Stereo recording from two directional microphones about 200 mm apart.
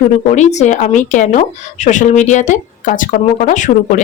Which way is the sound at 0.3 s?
35° left (ahead or behind).